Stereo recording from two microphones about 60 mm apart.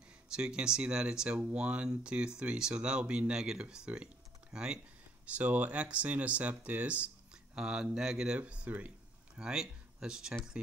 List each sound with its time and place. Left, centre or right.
0.3 s speech: centre
5.2 s speech: right
7.5 s speech: centre
8.4 s speech: right
9.4 s speech: centre